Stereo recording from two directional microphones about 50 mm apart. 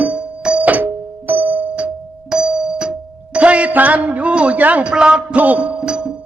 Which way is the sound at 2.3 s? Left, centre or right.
Centre.